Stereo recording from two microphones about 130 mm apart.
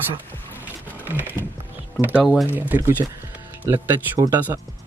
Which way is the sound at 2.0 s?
15° right (ahead or behind).